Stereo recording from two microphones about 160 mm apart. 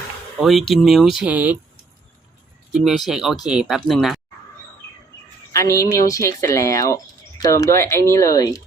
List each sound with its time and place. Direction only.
0.4 s speech: centre (ahead or behind)
2.8 s speech: centre (ahead or behind)
5.5 s speech: 20° left (ahead or behind)